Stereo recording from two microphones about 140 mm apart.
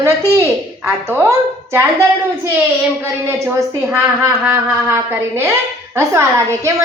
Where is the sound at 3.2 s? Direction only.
20° right (ahead or behind).